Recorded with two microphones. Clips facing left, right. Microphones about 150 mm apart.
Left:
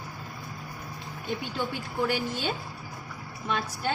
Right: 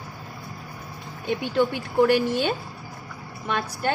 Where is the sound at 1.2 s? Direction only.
65° right (ahead or behind).